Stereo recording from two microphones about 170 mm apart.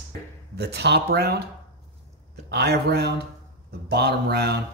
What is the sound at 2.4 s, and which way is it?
Speech, 75° right (ahead or behind).